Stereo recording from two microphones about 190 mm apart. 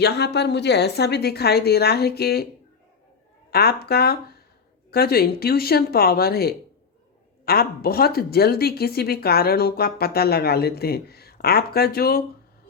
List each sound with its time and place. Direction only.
0.0 s speech: 60° left (ahead or behind)
3.5 s speech: 55° left (ahead or behind)